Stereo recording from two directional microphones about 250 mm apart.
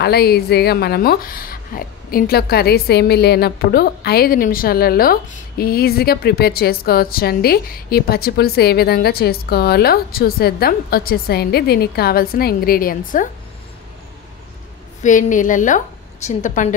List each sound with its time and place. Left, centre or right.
0.0 s a woman's voice: left
15.0 s a woman's voice: left